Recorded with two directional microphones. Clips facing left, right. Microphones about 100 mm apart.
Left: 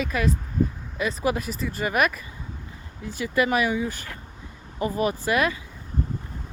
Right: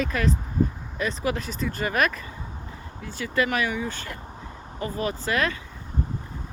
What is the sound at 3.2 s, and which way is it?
Speech, 15° left (ahead or behind).